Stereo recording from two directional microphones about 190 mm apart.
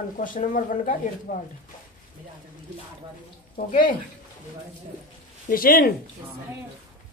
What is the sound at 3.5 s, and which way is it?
Speech, 45° left (ahead or behind).